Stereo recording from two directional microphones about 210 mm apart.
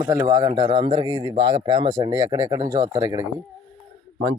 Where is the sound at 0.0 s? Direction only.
15° right (ahead or behind).